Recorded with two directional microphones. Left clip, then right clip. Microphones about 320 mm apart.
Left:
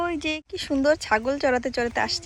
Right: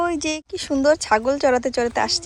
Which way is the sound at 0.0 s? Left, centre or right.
Centre.